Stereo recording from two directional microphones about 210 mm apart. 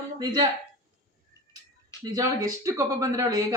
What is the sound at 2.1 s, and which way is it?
Speech, 15° right (ahead or behind).